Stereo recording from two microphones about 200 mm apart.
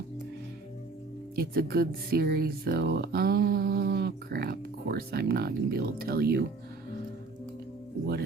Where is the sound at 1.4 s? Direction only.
50° right (ahead or behind).